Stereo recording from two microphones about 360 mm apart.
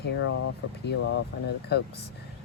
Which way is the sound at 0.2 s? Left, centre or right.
Left.